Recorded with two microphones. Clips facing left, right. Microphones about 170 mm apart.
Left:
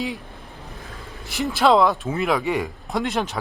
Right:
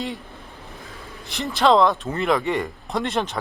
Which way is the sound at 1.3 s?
5° left (ahead or behind).